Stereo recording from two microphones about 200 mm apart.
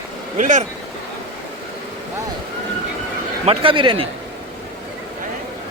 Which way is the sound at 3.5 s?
25° right (ahead or behind).